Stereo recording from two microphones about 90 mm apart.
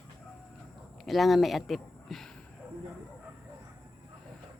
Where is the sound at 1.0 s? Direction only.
Centre (ahead or behind).